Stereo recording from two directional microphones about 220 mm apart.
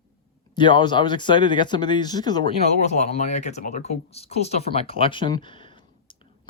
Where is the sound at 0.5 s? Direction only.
20° left (ahead or behind).